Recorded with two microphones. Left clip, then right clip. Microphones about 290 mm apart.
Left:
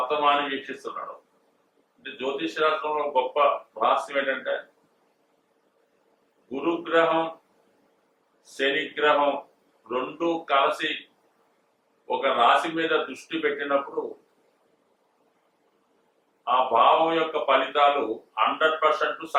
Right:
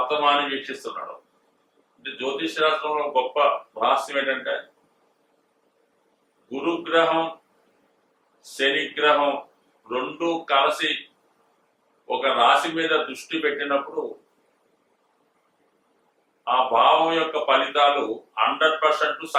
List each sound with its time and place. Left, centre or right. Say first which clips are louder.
0.0 s speech: right 2 dB; centre
6.7 s speech: right 2 dB; centre
8.7 s speech: right 2 dB; centre
12.1 s speech: right 2 dB; centre
13.9 s speech: right 2 dB; left
16.5 s speech: right 2 dB; centre